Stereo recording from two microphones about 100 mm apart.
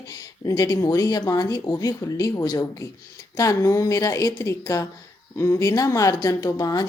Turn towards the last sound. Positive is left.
turn(degrees=40)  # may be behind; listen again after turning